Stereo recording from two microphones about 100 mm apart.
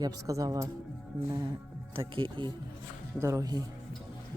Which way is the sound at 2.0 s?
60° right (ahead or behind).